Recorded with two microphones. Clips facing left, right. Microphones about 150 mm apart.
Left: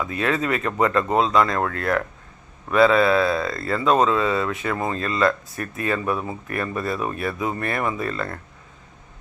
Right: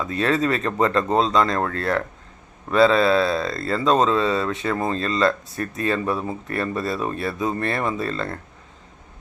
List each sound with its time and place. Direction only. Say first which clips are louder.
0.1 s speech: right 4 dB; 30° right (ahead or behind)